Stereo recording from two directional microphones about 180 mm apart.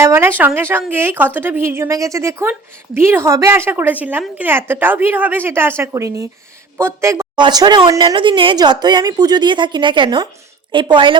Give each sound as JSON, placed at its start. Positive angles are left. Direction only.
{"t": 0.0, "sound": "a woman's voice", "side_deg": -15}